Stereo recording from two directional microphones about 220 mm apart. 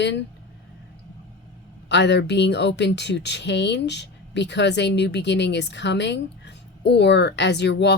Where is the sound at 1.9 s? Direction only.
50° left (ahead or behind).